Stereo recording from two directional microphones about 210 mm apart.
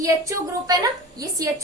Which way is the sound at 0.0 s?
15° right (ahead or behind).